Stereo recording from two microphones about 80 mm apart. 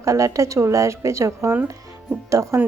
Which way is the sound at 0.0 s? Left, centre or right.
Right.